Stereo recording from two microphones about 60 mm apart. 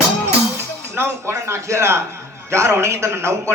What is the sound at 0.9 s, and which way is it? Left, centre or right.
A man's voice, right.